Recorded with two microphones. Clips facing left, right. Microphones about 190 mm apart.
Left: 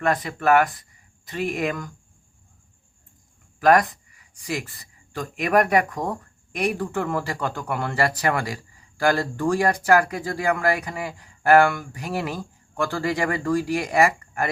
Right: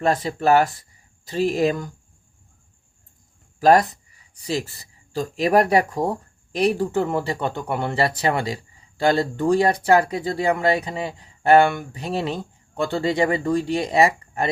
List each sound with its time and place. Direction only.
0.0 s speech: 30° right (ahead or behind)
3.6 s speech: 30° right (ahead or behind)